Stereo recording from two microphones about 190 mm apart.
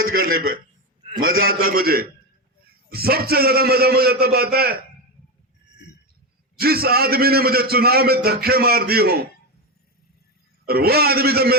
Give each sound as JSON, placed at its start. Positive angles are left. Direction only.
{"t": 0.1, "sound": "a man's voice", "side_deg": -50}
{"t": 6.6, "sound": "a man's voice", "side_deg": -55}
{"t": 10.7, "sound": "a man's voice", "side_deg": -55}